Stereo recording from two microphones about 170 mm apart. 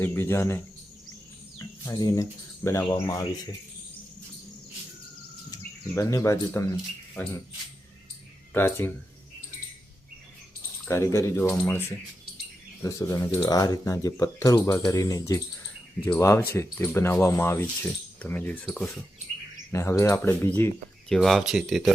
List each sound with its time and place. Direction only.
0.0 s speech: 15° left (ahead or behind)
1.5 s a sound: 20° left (ahead or behind)
2.6 s speech: 20° left (ahead or behind)
5.5 s speech: 20° left (ahead or behind)
8.5 s speech: 15° left (ahead or behind)
10.8 s speech: 15° left (ahead or behind)
19.7 s speech: 15° left (ahead or behind)
21.1 s speech: centre (ahead or behind)